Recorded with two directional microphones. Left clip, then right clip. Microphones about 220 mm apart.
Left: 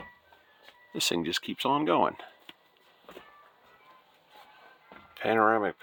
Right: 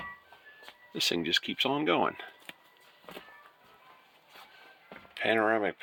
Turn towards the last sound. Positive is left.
turn(degrees=30)  # may be behind; listen again after turning